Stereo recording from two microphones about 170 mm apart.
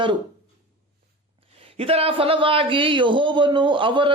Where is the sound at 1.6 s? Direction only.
35° right (ahead or behind).